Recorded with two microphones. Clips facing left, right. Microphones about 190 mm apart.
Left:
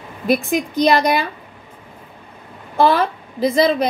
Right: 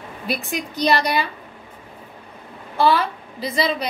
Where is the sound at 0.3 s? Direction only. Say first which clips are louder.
Left 9 dB; 50° left (ahead or behind).